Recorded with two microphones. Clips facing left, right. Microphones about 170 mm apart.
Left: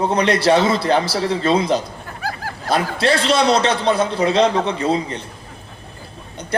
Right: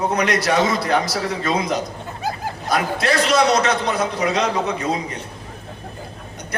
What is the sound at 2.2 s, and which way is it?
Hubbub, 20° right (ahead or behind).